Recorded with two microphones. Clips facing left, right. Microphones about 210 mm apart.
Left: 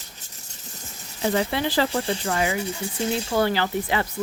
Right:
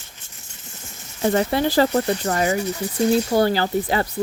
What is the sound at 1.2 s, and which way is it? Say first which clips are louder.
Speech: right 4 dB; 45° right (ahead or behind).